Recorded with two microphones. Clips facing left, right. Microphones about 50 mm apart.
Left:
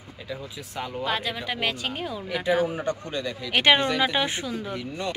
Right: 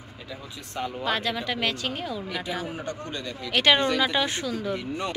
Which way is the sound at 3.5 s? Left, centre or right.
Left.